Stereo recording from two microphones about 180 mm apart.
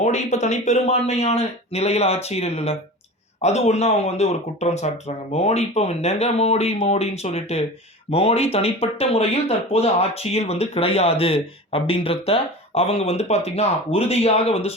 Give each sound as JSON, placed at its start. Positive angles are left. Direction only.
{"t": 0.0, "sound": "speech", "side_deg": 40}